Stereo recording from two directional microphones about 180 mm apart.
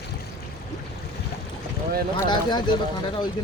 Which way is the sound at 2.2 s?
25° left (ahead or behind).